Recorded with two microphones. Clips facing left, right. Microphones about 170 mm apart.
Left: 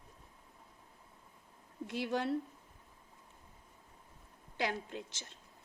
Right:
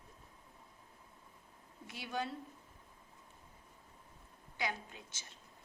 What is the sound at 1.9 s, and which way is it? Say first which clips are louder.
Speech: left 6 dB; 75° left (ahead or behind).